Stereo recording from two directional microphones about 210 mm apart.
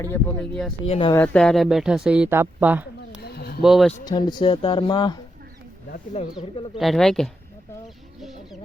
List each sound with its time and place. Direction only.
0.0 s speech: 10° left (ahead or behind)
0.9 s speech: 25° left (ahead or behind)
1.1 s speech: 5° left (ahead or behind); by 3.2 s 10° right (ahead or behind)
3.2 s a sound: 50° left (ahead or behind)
3.6 s speech: centre (ahead or behind)
4.0 s speech: 20° left (ahead or behind)
6.7 s speech: centre (ahead or behind)